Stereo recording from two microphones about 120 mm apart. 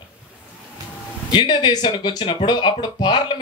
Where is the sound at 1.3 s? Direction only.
40° left (ahead or behind).